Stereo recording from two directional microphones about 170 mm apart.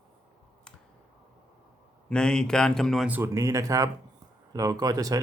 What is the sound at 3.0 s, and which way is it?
Speech, 15° right (ahead or behind).